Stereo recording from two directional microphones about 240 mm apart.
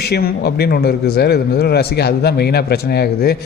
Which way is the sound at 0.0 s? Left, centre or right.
Left.